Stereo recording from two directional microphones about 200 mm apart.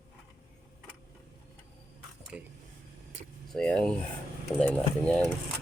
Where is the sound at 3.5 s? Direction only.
5° left (ahead or behind).